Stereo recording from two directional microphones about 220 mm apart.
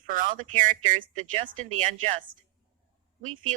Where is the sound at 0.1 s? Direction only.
40° right (ahead or behind).